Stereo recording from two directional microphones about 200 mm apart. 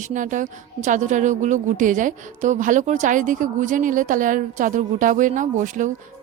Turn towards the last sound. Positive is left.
turn(degrees=-40)  # may be behind; listen again after turning